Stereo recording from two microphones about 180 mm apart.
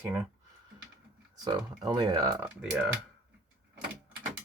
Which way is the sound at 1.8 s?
25° right (ahead or behind).